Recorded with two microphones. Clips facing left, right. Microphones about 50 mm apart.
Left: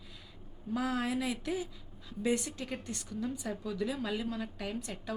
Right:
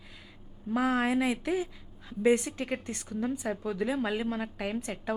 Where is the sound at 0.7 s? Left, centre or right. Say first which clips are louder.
Right 6 dB; right.